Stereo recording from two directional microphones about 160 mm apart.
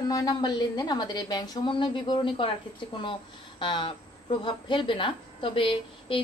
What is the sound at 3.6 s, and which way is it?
Speech, 30° left (ahead or behind).